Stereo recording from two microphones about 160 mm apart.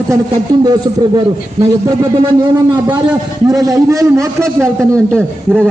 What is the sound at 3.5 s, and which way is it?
A man's voice, 20° right (ahead or behind).